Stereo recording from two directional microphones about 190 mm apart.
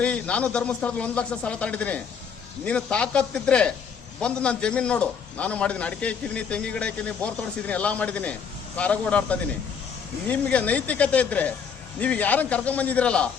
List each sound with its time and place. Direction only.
0.0 s a man's voice: 5° left (ahead or behind)